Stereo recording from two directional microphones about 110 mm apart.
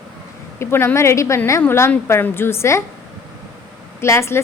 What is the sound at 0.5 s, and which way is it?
A woman's voice, 25° left (ahead or behind).